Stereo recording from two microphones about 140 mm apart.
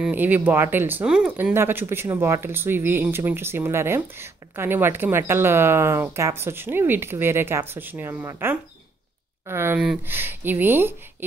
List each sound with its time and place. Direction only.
0.0 s speech: 15° right (ahead or behind)